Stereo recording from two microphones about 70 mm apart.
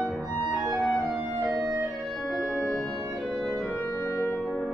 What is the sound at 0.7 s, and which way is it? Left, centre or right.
Clarinet, centre.